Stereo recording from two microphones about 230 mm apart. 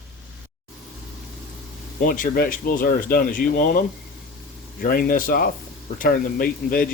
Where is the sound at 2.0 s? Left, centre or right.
Left.